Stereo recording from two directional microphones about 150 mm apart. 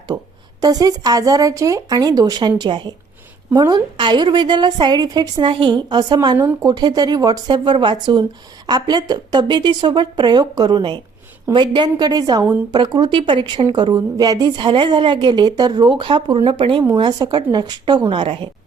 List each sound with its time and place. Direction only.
0.1 s a woman's voice: 25° right (ahead or behind)